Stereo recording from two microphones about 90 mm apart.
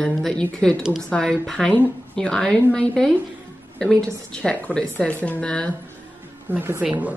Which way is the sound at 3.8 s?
10° left (ahead or behind).